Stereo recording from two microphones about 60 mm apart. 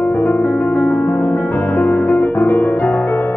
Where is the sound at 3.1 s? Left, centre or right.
Left.